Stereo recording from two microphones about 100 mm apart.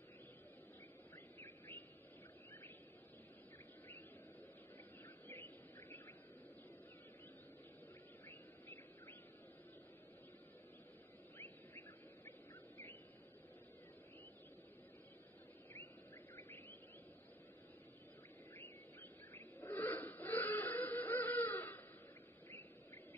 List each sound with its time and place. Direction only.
1.4 s bird: 20° left (ahead or behind)
5.3 s a sound: 25° left (ahead or behind)
8.3 s bird: 25° left (ahead or behind)
11.3 s bird: 20° left (ahead or behind)
16.3 s a sound: 20° left (ahead or behind)
19.3 s music: 20° left (ahead or behind)